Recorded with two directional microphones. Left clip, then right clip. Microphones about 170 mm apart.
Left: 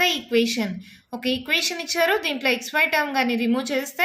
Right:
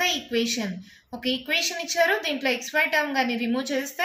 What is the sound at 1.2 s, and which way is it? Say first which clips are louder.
A woman's voice: left 2 dB; 40° left (ahead or behind).